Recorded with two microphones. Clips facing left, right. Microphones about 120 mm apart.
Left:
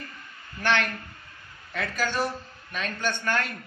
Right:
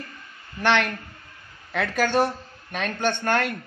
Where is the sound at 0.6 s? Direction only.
75° right (ahead or behind).